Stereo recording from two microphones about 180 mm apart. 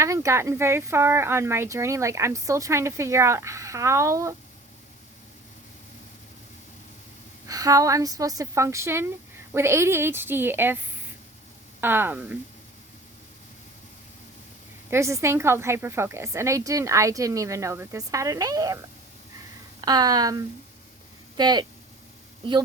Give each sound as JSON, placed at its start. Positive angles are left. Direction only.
{"t": 0.0, "sound": "speech", "side_deg": -15}
{"t": 7.4, "sound": "speech", "side_deg": -20}
{"t": 11.8, "sound": "speech", "side_deg": -10}
{"t": 14.8, "sound": "speech", "side_deg": -15}
{"t": 19.8, "sound": "speech", "side_deg": -20}